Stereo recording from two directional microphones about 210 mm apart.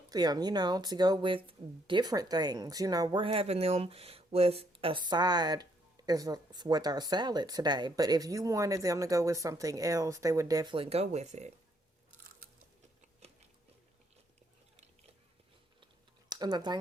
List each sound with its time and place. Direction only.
0.1 s speech: 20° right (ahead or behind)
16.3 s speech: 20° right (ahead or behind)